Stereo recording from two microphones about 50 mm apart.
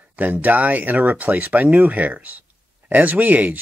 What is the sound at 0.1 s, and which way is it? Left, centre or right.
Speech, right.